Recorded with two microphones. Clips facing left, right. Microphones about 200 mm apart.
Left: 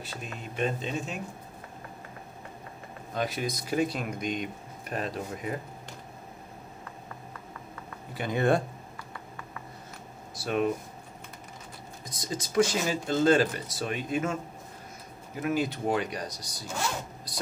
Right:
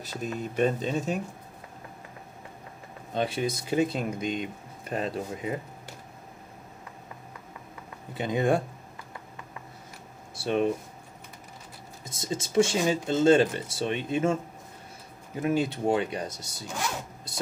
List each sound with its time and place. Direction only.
0.4 s speech: 40° right (ahead or behind)
3.2 s speech: 30° right (ahead or behind)
8.1 s speech: 20° right (ahead or behind)
10.3 s speech: 30° right (ahead or behind)
12.0 s speech: 25° right (ahead or behind)
15.4 s speech: 30° right (ahead or behind)